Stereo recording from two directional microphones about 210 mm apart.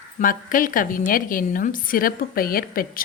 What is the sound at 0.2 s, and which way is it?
A woman's voice, 40° left (ahead or behind).